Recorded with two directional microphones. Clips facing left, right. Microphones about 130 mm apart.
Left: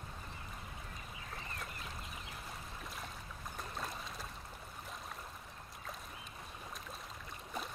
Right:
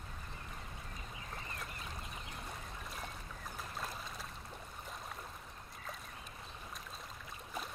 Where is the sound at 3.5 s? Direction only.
Centre (ahead or behind).